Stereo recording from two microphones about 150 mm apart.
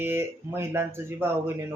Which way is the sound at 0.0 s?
15° right (ahead or behind).